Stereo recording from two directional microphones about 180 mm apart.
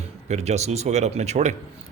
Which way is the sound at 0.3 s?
40° right (ahead or behind).